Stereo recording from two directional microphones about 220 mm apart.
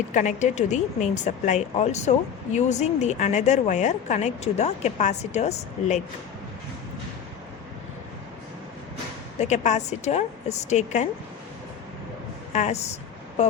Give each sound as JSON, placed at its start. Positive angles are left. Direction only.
{"t": 0.1, "sound": "a woman's voice", "side_deg": 35}
{"t": 9.4, "sound": "a woman's voice", "side_deg": 30}
{"t": 12.5, "sound": "speech", "side_deg": 30}